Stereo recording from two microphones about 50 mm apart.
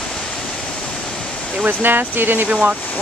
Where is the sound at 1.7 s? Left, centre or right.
Right.